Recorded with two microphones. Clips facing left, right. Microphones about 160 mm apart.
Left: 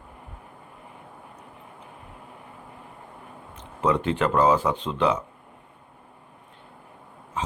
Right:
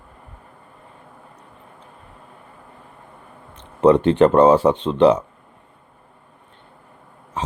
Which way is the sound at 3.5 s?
30° right (ahead or behind).